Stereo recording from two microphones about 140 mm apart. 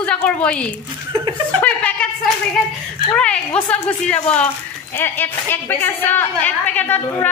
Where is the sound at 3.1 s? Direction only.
5° left (ahead or behind).